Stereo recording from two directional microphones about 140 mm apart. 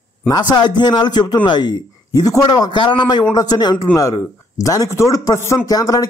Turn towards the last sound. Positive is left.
turn(degrees=25)  # may be behind; listen again after turning